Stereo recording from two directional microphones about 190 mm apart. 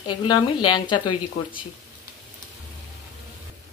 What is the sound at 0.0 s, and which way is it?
A woman's voice, 25° left (ahead or behind).